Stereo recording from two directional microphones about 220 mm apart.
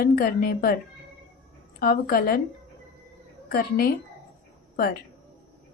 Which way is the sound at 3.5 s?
45° left (ahead or behind).